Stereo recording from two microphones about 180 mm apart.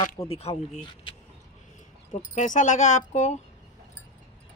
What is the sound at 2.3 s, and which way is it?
Speech, 45° left (ahead or behind).